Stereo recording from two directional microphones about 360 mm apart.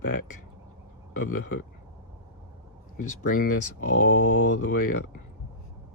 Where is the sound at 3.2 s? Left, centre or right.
Left.